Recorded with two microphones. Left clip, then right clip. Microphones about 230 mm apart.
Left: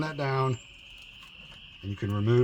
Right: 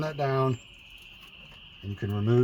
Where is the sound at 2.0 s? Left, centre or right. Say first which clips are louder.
Even; left.